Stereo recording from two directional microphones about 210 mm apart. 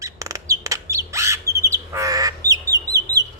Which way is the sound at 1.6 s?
15° right (ahead or behind).